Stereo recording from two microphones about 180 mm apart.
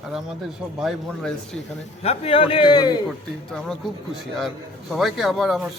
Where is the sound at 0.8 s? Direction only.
Centre (ahead or behind).